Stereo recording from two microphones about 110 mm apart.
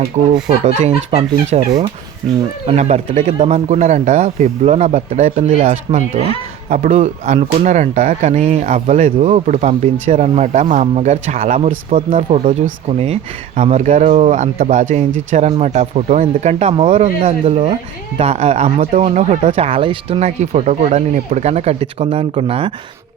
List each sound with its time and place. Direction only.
0.1 s speech: 90° right
2.6 s speech: 80° right
6.9 s speech: 90° right; by 13.1 s 65° right (ahead or behind)
13.6 s speech: 90° right; by 20.1 s 55° right (ahead or behind)
20.1 s speech: 85° right; by 22.7 s 60° right (ahead or behind)